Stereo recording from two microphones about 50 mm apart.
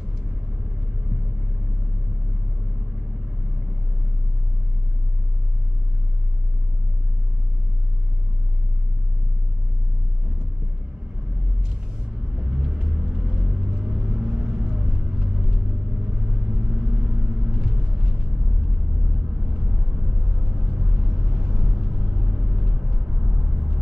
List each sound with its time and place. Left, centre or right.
12.4 s vehicle: centre
19.4 s vehicle: centre